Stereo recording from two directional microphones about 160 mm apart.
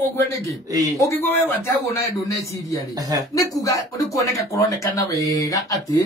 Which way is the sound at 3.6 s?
20° left (ahead or behind).